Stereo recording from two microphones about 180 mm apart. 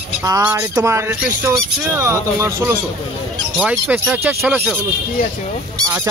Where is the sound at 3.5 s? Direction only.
Centre (ahead or behind).